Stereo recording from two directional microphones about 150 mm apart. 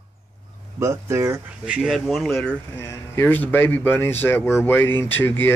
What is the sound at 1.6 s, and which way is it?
Speech, 5° right (ahead or behind).